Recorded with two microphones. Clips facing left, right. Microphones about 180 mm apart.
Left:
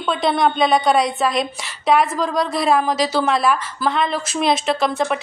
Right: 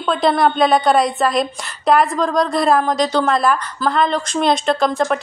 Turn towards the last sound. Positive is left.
turn(degrees=5)  # may be behind; listen again after turning